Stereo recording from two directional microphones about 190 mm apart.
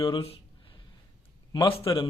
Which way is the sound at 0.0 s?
30° left (ahead or behind).